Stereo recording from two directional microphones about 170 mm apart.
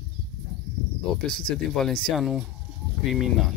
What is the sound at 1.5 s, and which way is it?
Speech, 5° left (ahead or behind).